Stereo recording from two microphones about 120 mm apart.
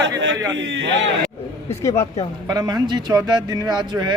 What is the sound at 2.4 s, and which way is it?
A man's voice, 35° right (ahead or behind).